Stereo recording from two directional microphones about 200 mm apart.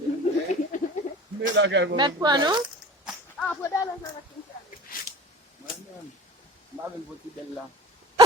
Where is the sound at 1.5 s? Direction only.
65° right (ahead or behind).